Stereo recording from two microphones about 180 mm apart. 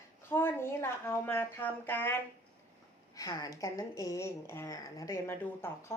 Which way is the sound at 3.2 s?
20° left (ahead or behind).